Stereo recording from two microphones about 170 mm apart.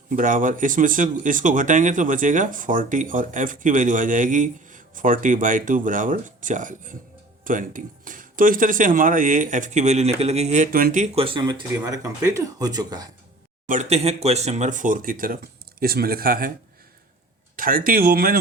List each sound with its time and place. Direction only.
0.1 s speech: 50° right (ahead or behind)
11.0 s speech: 35° right (ahead or behind)
13.7 s speech: 40° right (ahead or behind); by 16.5 s 60° right (ahead or behind)
17.6 s speech: 55° right (ahead or behind)